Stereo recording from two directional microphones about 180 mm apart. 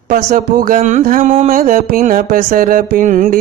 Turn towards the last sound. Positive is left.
turn(degrees=-45)  # may be behind; listen again after turning